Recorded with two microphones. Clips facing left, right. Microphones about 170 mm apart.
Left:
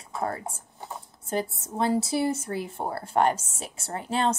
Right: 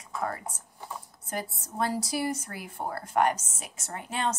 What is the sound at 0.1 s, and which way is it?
A woman's voice, 30° left (ahead or behind).